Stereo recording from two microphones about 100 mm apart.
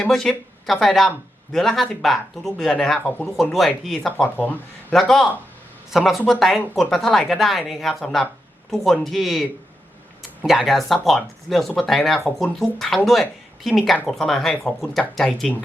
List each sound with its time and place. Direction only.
0.0 s speech: 5° left (ahead or behind)
4.4 s speech: 15° left (ahead or behind)
4.9 s speech: 5° left (ahead or behind)